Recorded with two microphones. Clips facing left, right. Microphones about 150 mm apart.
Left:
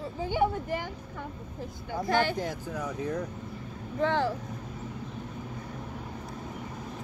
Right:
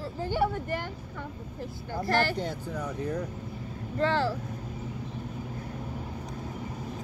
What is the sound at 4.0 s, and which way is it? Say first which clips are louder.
Speech: even; 15° left (ahead or behind).